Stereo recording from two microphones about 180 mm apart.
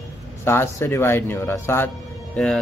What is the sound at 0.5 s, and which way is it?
Speech, 15° left (ahead or behind).